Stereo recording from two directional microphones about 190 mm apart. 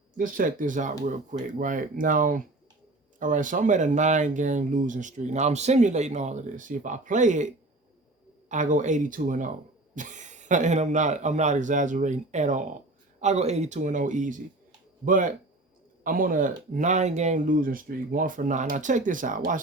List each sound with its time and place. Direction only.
0.2 s speech: 45° right (ahead or behind)